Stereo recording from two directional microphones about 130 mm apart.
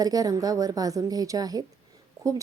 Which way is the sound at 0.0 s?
30° right (ahead or behind).